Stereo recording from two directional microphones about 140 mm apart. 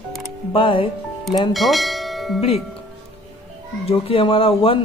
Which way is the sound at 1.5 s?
Centre (ahead or behind).